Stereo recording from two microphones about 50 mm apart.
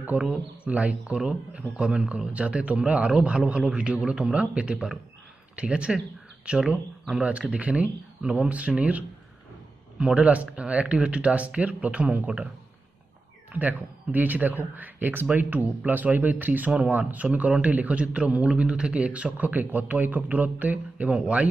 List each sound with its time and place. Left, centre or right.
0.3 s speech: right
1.1 s speech: centre
7.5 s speech: right
13.5 s a man's voice: right
16.7 s a man's voice: right